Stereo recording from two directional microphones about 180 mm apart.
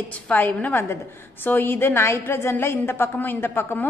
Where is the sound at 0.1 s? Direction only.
10° left (ahead or behind).